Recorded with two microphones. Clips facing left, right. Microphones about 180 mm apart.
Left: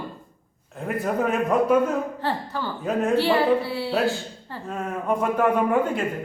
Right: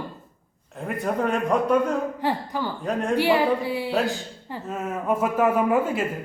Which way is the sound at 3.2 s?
15° right (ahead or behind).